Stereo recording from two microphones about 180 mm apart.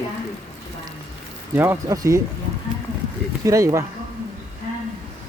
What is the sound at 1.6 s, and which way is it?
Speech, 15° right (ahead or behind).